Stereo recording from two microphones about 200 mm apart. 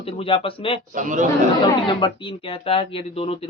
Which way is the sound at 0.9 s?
40° right (ahead or behind).